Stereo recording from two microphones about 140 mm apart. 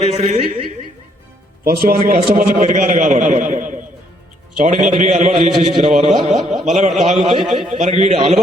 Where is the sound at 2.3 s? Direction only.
65° right (ahead or behind).